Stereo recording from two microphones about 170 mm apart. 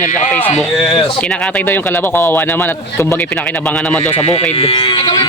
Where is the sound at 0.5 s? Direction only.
Centre (ahead or behind).